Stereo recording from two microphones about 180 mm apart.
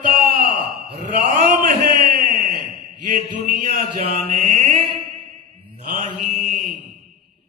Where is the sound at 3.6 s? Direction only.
55° right (ahead or behind).